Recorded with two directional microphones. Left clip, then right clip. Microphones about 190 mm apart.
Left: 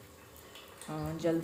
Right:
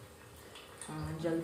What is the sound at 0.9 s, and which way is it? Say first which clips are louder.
Speech: left 5 dB; 40° left (ahead or behind).